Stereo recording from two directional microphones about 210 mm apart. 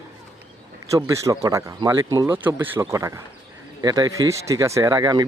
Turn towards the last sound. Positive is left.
turn(degrees=-20)  # may be behind; listen again after turning